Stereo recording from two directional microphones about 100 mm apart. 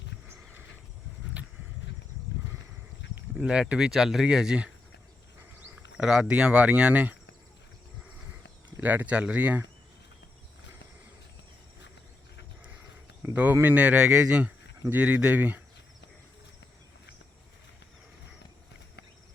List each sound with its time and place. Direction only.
3.4 s speech: 10° right (ahead or behind)
5.7 s speech: 5° right (ahead or behind)
8.8 s speech: 15° right (ahead or behind)
13.2 s speech: 15° right (ahead or behind)